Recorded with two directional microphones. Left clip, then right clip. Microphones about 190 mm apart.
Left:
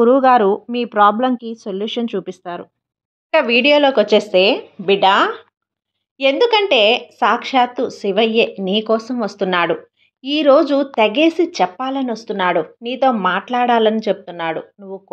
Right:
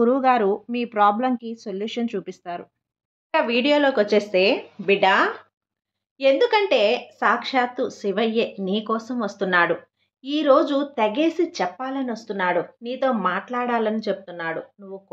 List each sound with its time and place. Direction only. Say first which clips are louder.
0.0 s speech: left 7 dB; 25° left (ahead or behind)
3.3 s speech: left 7 dB; 20° left (ahead or behind)